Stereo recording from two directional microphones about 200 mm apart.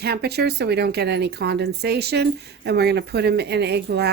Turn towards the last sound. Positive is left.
turn(degrees=-55)  # may be behind; listen again after turning